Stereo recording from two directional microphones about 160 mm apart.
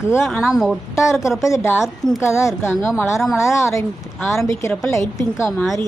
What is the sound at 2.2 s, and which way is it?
Speech, 15° left (ahead or behind).